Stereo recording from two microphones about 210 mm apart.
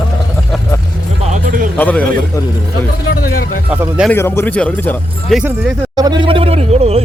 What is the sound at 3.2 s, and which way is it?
Music, 45° left (ahead or behind).